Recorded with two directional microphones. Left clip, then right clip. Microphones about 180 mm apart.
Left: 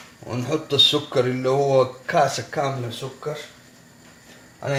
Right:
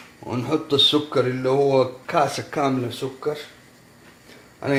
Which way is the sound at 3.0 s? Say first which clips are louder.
Right 4 dB; 75° right (ahead or behind).